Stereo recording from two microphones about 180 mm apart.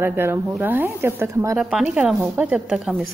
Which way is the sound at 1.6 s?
5° right (ahead or behind).